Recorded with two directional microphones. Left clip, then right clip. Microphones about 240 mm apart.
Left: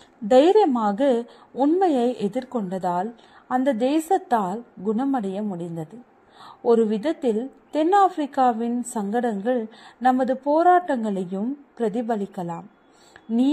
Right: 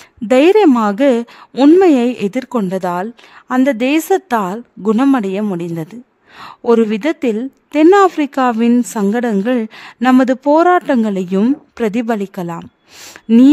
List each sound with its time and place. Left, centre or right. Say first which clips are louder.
0.3 s a woman's voice: right 7 dB; right